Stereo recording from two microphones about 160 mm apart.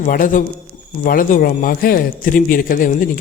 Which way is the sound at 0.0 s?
55° left (ahead or behind).